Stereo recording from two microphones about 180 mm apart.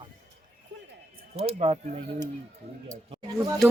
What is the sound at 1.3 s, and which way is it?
Speech, 35° right (ahead or behind).